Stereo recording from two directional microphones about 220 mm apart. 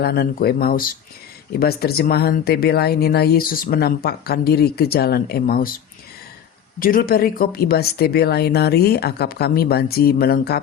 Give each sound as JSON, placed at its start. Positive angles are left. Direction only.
{"t": 0.0, "sound": "speech", "side_deg": 45}
{"t": 6.7, "sound": "speech", "side_deg": 40}